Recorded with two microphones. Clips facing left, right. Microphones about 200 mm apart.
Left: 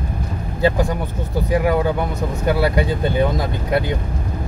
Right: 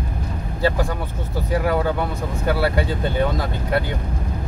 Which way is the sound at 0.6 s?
15° left (ahead or behind).